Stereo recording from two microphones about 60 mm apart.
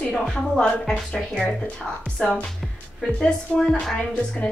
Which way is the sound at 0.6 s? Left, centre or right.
Centre.